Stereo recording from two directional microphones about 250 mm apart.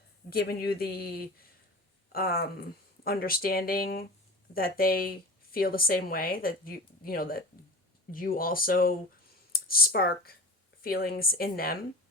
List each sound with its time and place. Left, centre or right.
0.3 s speech: left